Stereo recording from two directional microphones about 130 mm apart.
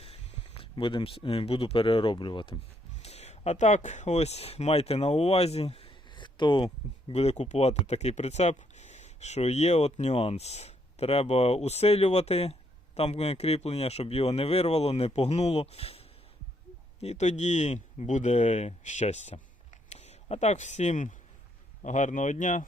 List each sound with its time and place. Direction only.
0.0 s speech: 45° left (ahead or behind)
3.0 s speech: 55° left (ahead or behind); by 6.7 s 40° left (ahead or behind)
7.1 s speech: 55° left (ahead or behind)
17.0 s speech: 60° left (ahead or behind)